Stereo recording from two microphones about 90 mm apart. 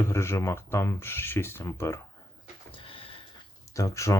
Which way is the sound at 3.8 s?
35° left (ahead or behind).